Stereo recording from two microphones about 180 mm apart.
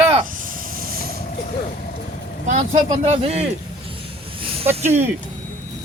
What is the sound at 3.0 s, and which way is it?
Speech, 35° right (ahead or behind).